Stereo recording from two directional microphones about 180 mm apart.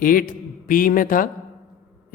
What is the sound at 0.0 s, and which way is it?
A man's voice, 50° left (ahead or behind).